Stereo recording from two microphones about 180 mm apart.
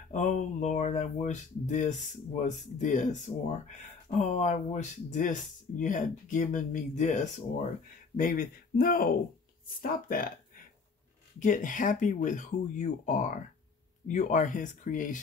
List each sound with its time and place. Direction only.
0.1 s speech: 45° left (ahead or behind)